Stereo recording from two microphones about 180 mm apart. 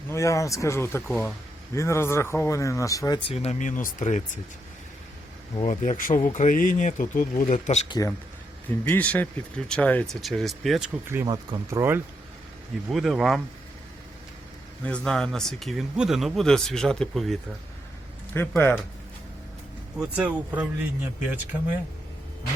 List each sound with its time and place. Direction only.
0.1 s speech: 15° left (ahead or behind)
3.2 s speech: 35° left (ahead or behind)
5.6 s speech: 45° left (ahead or behind)
7.9 s speech: 20° left (ahead or behind); by 11.3 s 10° right (ahead or behind)
11.3 s speech: 20° right (ahead or behind)
12.9 s speech: centre (ahead or behind)
14.8 s speech: 5° left (ahead or behind)
18.3 s speech: 10° left (ahead or behind)
20.0 s speech: 10° right (ahead or behind)